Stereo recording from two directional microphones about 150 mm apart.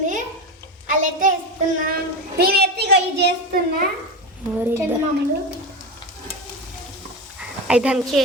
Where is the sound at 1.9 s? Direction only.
90° right.